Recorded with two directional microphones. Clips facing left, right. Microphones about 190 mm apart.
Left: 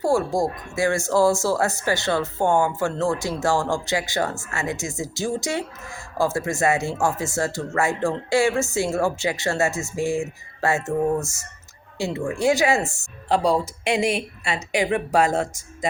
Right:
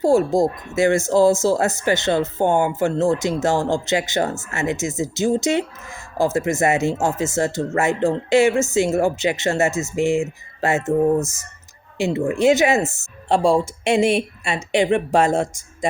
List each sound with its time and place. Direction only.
0.0 s speech: 20° right (ahead or behind)